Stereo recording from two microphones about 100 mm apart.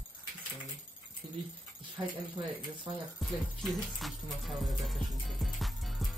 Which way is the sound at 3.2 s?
Centre (ahead or behind).